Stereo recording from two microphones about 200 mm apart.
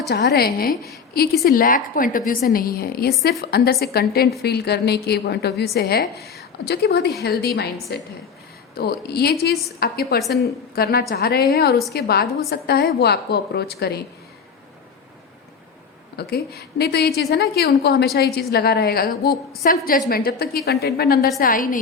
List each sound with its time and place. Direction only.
0.0 s a woman's voice: 55° left (ahead or behind)
16.1 s a woman's voice: 50° left (ahead or behind)